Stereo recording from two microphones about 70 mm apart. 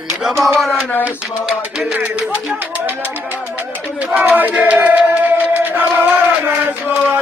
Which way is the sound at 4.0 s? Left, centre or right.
Right.